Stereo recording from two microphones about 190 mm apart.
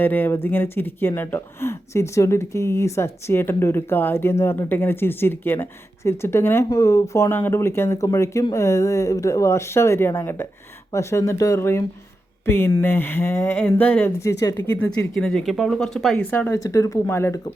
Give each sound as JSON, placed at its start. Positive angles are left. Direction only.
{"t": 0.0, "sound": "speech", "side_deg": 10}